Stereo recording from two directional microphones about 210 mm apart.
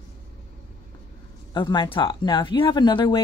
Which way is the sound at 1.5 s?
20° left (ahead or behind).